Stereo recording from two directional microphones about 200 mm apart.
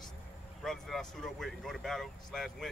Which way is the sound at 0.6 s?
Centre (ahead or behind).